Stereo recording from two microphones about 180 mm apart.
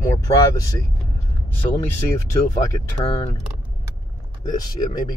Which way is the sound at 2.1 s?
20° left (ahead or behind).